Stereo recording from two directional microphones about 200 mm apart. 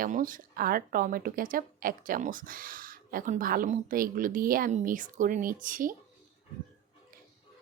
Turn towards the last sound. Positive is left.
turn(degrees=-45)  # may be behind; listen again after turning